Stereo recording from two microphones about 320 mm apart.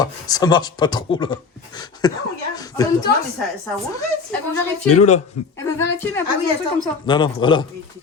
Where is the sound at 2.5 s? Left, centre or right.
Centre.